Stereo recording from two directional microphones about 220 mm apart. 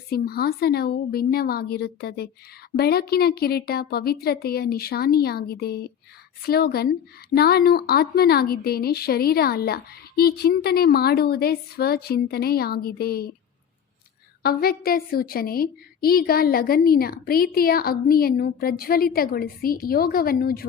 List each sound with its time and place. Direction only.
0.1 s a woman's voice: 45° left (ahead or behind)
14.4 s a woman's voice: 45° left (ahead or behind)